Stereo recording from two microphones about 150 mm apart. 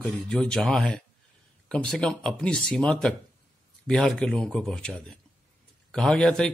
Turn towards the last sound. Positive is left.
turn(degrees=5)  # may be behind; listen again after turning